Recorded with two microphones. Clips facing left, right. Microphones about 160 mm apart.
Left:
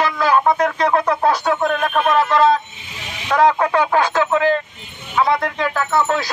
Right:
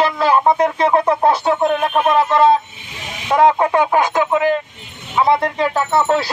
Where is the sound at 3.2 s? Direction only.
20° right (ahead or behind).